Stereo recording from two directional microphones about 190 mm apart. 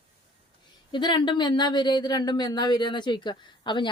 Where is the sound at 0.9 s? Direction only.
25° left (ahead or behind).